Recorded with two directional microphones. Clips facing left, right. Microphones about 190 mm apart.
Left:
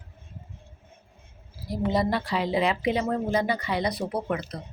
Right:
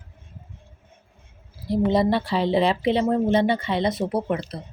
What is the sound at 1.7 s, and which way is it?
Speech, 25° right (ahead or behind).